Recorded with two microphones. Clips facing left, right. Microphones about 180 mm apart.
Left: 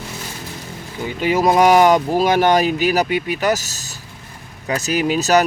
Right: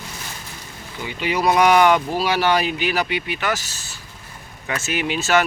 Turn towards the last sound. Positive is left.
turn(degrees=40)  # may be behind; listen again after turning